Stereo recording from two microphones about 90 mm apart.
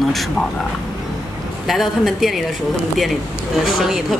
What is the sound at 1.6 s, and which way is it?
Speech, centre (ahead or behind).